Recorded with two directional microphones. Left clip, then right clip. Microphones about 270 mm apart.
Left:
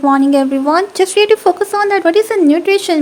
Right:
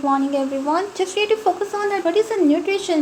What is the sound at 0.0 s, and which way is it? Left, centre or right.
Speech, left.